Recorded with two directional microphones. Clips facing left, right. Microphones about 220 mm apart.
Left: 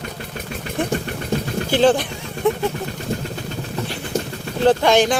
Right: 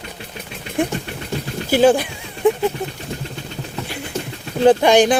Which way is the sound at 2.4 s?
15° right (ahead or behind).